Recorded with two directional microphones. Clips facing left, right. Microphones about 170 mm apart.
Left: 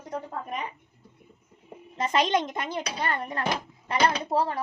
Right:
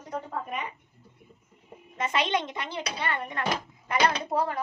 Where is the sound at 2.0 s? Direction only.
40° left (ahead or behind).